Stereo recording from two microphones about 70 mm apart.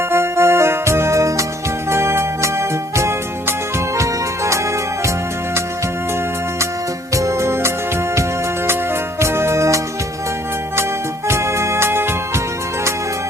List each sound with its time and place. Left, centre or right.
0.1 s music: right
7.1 s music: right
9.2 s music: right
11.3 s music: right